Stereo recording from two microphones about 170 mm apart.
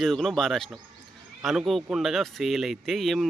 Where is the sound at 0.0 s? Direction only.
Centre (ahead or behind).